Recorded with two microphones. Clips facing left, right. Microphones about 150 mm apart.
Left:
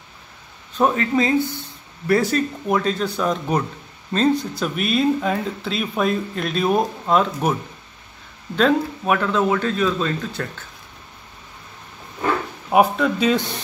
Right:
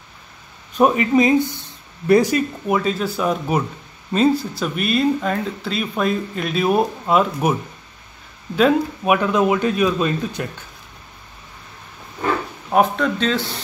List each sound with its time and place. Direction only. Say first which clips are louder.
0.7 s speech: right 3 dB; 15° right (ahead or behind)
8.5 s speech: right 2 dB; 10° right (ahead or behind)
12.6 s speech: left 1 dB; 5° left (ahead or behind)